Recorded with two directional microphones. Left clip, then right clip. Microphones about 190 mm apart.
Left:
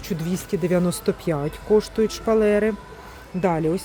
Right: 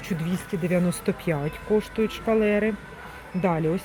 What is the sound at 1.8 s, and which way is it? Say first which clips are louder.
A woman's voice: left 4 dB; 30° left (ahead or behind).